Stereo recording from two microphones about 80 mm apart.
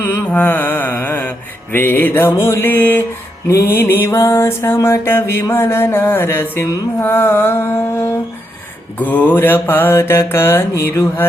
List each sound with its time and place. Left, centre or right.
0.0 s mantra: left
4.0 s music: left
9.0 s mantra: centre